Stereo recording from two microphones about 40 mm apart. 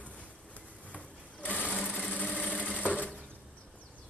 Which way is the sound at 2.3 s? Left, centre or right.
Left.